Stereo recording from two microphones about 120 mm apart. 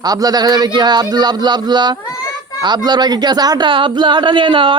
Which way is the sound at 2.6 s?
35° right (ahead or behind).